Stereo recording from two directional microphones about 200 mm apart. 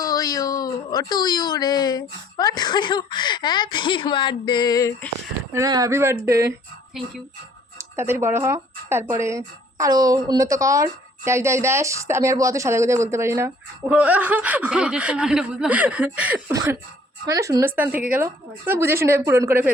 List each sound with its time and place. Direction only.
0.0 s speech: 20° left (ahead or behind)
5.5 s speech: 15° right (ahead or behind)
6.9 s speech: centre (ahead or behind)
7.8 s speech: 15° right (ahead or behind)